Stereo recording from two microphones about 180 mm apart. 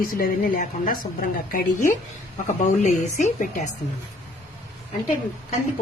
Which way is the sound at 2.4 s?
45° left (ahead or behind).